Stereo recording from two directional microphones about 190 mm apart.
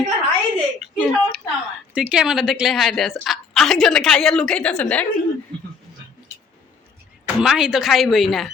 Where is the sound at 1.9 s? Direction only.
5° right (ahead or behind).